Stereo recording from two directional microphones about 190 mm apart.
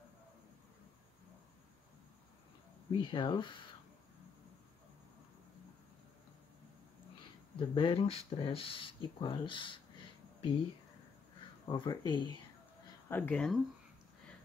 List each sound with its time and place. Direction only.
3.0 s speech: 25° left (ahead or behind)
7.5 s speech: 25° left (ahead or behind)
11.6 s speech: 25° left (ahead or behind)
13.1 s speech: 10° left (ahead or behind)